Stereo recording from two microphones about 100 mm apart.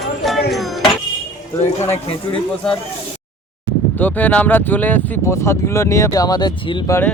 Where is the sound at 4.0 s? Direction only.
15° left (ahead or behind).